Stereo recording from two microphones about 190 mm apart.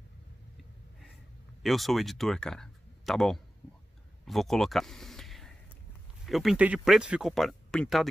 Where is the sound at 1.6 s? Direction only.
Centre (ahead or behind).